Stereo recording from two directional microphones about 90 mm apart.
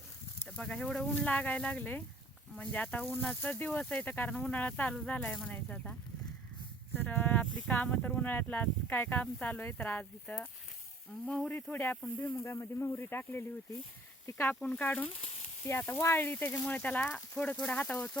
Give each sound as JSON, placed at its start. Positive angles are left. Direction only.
{"t": 0.5, "sound": "speech", "side_deg": 10}
{"t": 1.2, "sound": "speech", "side_deg": 15}
{"t": 6.9, "sound": "a sound", "side_deg": 20}
{"t": 7.7, "sound": "speech", "side_deg": 20}
{"t": 11.1, "sound": "speech", "side_deg": 0}
{"t": 11.4, "sound": "speech", "side_deg": 20}
{"t": 14.5, "sound": "speech", "side_deg": 15}